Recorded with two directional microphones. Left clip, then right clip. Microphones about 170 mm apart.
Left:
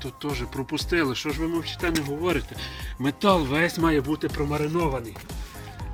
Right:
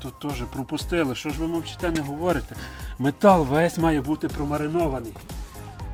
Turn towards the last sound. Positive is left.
turn(degrees=-20)  # may be behind; listen again after turning